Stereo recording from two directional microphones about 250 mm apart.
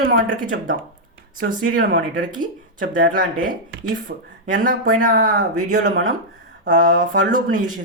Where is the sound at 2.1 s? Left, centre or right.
Right.